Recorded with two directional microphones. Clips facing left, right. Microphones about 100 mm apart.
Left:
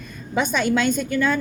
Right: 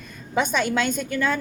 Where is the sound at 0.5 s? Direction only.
50° right (ahead or behind).